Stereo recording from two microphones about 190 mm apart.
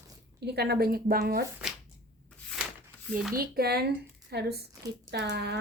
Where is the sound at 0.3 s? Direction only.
60° right (ahead or behind).